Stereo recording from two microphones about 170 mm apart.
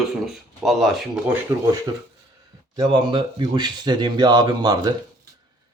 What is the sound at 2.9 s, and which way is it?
Speech, 30° right (ahead or behind).